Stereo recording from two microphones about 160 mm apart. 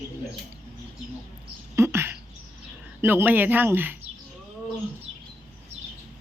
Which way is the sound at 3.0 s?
10° right (ahead or behind).